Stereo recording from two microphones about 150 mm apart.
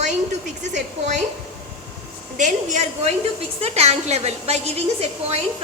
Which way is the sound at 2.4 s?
55° right (ahead or behind).